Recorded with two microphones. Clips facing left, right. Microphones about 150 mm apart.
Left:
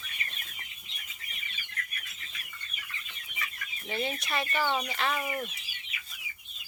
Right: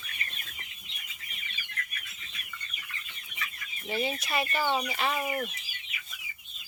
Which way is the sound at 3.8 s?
5° right (ahead or behind).